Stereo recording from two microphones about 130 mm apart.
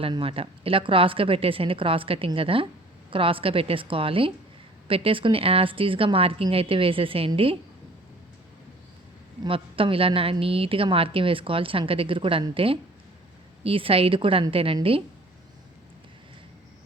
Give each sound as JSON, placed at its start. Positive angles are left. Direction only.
{"t": 0.0, "sound": "a woman's voice", "side_deg": -45}
{"t": 9.4, "sound": "a woman's voice", "side_deg": -45}